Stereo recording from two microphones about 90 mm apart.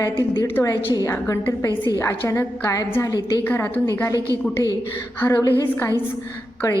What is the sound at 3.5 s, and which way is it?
Speech, 20° left (ahead or behind).